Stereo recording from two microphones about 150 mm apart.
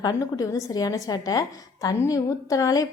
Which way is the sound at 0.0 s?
25° left (ahead or behind).